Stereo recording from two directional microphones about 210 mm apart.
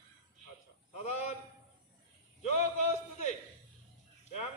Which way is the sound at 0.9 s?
35° left (ahead or behind).